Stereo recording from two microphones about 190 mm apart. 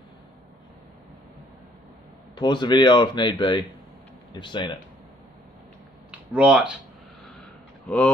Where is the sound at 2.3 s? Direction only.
25° left (ahead or behind).